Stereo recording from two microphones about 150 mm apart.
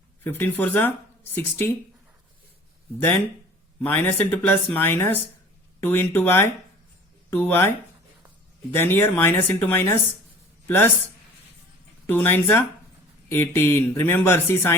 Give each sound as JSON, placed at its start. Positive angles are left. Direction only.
{"t": 0.3, "sound": "speech", "side_deg": 15}
{"t": 3.8, "sound": "speech", "side_deg": 10}
{"t": 12.0, "sound": "speech", "side_deg": 10}